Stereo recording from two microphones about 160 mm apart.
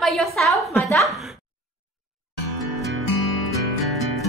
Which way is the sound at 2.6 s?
Centre (ahead or behind).